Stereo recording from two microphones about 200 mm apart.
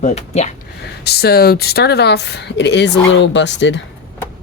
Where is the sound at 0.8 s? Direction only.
55° left (ahead or behind).